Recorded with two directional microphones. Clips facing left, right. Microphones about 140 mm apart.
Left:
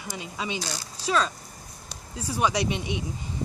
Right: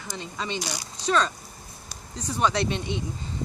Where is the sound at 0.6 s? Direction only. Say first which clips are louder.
Right 1 dB; 15° right (ahead or behind).